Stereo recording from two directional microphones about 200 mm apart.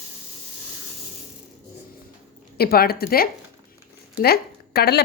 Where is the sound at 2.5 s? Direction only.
50° left (ahead or behind).